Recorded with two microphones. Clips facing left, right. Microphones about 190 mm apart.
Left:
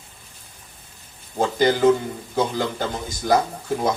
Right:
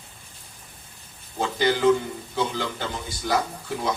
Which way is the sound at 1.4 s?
45° left (ahead or behind).